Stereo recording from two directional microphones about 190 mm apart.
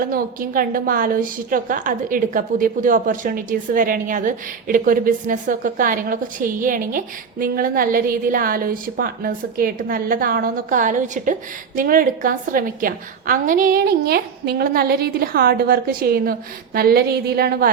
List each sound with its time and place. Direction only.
0.0 s a woman's voice: 50° right (ahead or behind)